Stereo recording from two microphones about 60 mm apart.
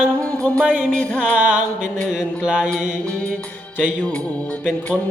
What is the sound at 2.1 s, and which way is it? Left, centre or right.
Music, centre.